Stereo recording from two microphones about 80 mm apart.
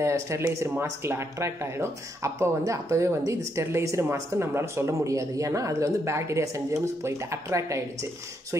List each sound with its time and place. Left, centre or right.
0.0 s speech: right